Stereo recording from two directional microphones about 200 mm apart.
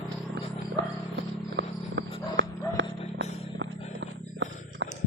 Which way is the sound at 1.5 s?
65° right (ahead or behind).